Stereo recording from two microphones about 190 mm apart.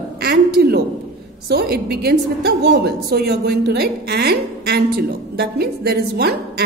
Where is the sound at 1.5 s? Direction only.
55° right (ahead or behind).